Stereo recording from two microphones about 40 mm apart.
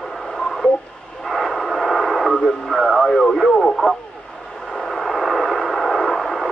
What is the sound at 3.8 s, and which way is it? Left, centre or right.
Speech, left.